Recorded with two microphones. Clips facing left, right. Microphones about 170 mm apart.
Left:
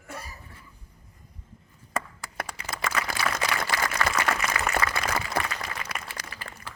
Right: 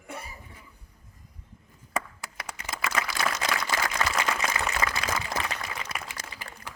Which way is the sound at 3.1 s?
50° left (ahead or behind).